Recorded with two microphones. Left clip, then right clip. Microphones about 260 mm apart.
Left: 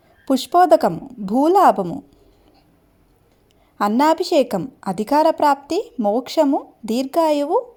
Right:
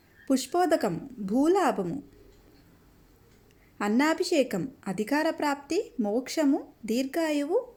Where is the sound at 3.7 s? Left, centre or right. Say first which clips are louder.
Left 10 dB; left.